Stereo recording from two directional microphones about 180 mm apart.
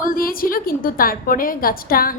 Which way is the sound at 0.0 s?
50° left (ahead or behind).